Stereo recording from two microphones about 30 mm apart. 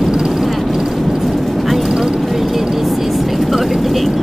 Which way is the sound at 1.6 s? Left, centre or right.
Centre.